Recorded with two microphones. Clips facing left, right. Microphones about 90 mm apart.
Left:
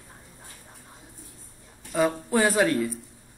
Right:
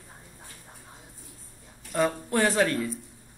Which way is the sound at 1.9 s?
5° left (ahead or behind).